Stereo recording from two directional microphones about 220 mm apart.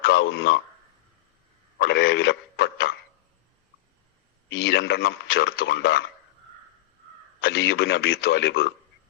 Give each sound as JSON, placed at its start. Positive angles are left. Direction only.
{"t": 0.0, "sound": "speech", "side_deg": 45}
{"t": 1.8, "sound": "a man's voice", "side_deg": 45}
{"t": 4.4, "sound": "a man's voice", "side_deg": 50}
{"t": 7.4, "sound": "a man's voice", "side_deg": 45}